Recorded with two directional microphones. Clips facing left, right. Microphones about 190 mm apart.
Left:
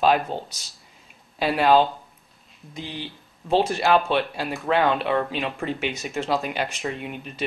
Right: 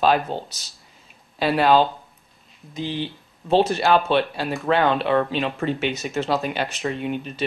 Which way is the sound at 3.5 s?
Centre (ahead or behind).